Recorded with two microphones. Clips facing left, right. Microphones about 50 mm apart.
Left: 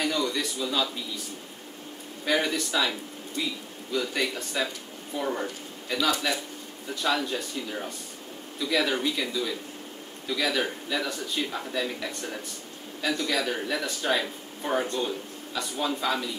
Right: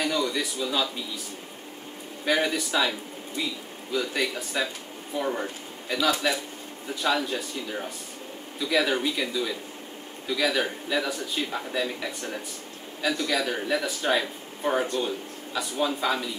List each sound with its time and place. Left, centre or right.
0.0 s a man's voice: centre
2.2 s a man's voice: centre